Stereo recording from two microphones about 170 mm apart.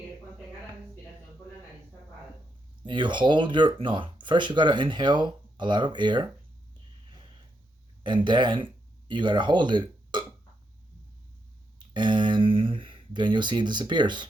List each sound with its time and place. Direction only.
2.8 s speech: 25° right (ahead or behind)
8.0 s speech: 25° right (ahead or behind)
11.8 s speech: 25° right (ahead or behind)